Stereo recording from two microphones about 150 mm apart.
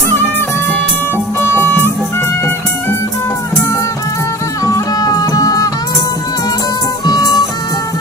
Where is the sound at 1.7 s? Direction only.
15° left (ahead or behind).